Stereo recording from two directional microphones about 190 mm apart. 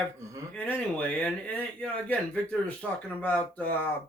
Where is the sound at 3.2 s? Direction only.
10° left (ahead or behind).